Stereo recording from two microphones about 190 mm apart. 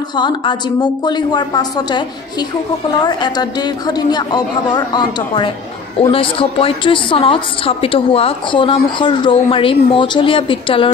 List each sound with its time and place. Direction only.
0.1 s a woman's voice: 25° left (ahead or behind)